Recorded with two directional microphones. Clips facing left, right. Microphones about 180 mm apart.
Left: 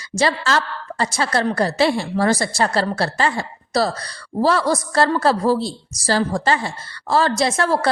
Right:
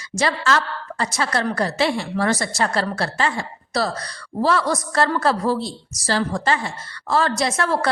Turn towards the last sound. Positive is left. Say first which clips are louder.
# left 2 dB
turn(degrees=30)  # may be behind; listen again after turning